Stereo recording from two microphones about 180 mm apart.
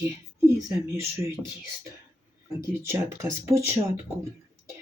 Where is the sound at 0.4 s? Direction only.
15° right (ahead or behind).